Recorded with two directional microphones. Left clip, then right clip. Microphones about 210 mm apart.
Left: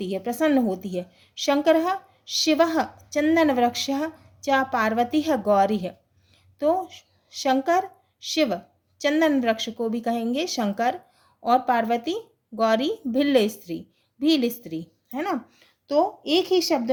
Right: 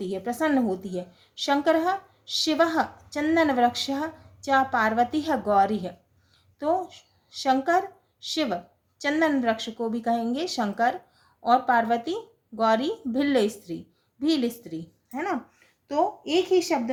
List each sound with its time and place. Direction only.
0.0 s a woman's voice: 40° left (ahead or behind)